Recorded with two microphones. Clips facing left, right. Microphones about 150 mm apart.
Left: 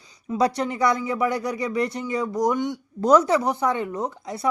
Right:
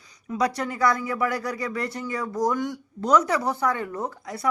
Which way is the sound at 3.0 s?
35° left (ahead or behind).